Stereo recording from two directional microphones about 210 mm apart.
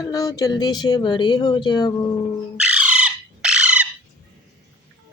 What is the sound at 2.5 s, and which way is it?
Squawk, 5° right (ahead or behind).